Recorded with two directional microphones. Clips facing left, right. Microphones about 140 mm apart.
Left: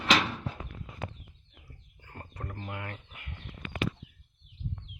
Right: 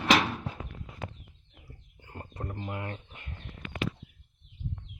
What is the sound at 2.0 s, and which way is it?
Chicken, 25° right (ahead or behind).